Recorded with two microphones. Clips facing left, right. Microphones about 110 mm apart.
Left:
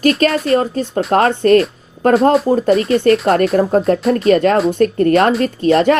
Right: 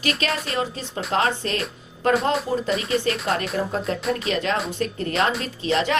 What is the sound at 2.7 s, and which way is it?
Speech, centre (ahead or behind).